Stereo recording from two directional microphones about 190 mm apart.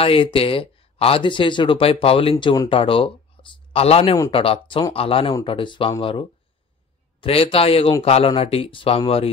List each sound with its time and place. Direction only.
0.0 s speech: 30° left (ahead or behind)
2.3 s speech: 20° left (ahead or behind)
3.4 s a sound: 25° left (ahead or behind)
3.7 s speech: 30° left (ahead or behind)